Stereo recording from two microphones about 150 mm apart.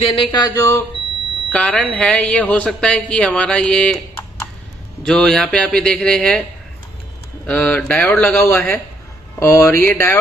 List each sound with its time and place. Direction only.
0.0 s speech: 35° left (ahead or behind)
1.5 s speech: 5° left (ahead or behind)
5.0 s a man's voice: 5° left (ahead or behind)
7.4 s speech: 10° left (ahead or behind)